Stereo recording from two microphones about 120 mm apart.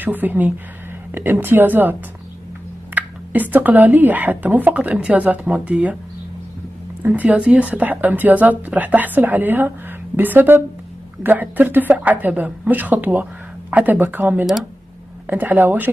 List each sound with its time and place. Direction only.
0.0 s speech: 15° right (ahead or behind)
7.0 s speech: 15° right (ahead or behind)
14.4 s speech: 5° right (ahead or behind)
15.2 s speech: 15° right (ahead or behind)